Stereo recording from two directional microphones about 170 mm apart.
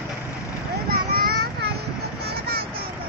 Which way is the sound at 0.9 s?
60° right (ahead or behind).